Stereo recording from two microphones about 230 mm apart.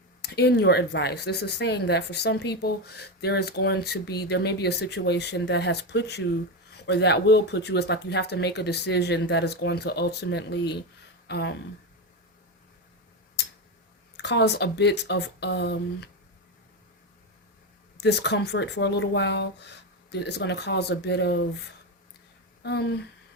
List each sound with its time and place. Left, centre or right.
0.2 s speech: left
14.2 s speech: left
17.9 s speech: left
22.6 s speech: left